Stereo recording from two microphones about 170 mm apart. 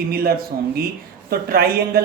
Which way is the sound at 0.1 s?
65° right (ahead or behind).